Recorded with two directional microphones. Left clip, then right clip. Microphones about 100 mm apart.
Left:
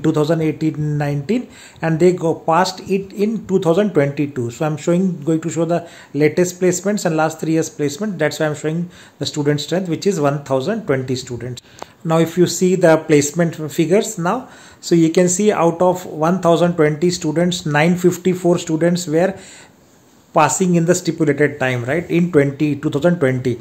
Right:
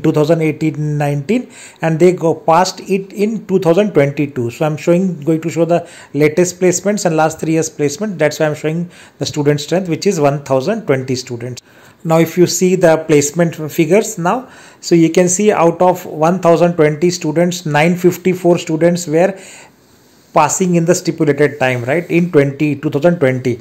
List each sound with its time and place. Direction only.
0.0 s speech: 25° right (ahead or behind)
0.7 s speech: 20° right (ahead or behind)
1.2 s speech: 30° right (ahead or behind)
20.3 s speech: 15° right (ahead or behind)